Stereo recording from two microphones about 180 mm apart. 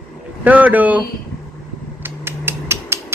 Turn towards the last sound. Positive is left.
turn(degrees=-15)  # may be behind; listen again after turning